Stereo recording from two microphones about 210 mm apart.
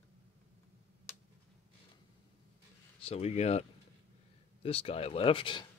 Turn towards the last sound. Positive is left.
turn(degrees=25)  # may be behind; listen again after turning